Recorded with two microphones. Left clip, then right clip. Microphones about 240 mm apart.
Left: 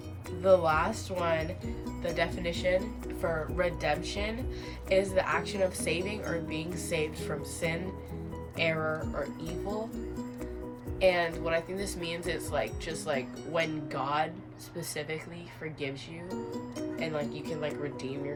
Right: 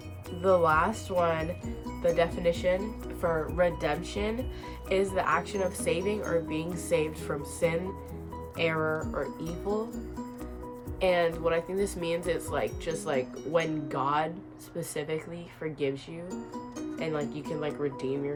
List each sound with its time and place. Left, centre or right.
0.4 s speech: centre
11.0 s speech: centre
17.0 s speech: centre